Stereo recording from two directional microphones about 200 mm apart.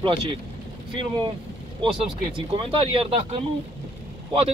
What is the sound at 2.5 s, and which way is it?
Speech, 30° right (ahead or behind).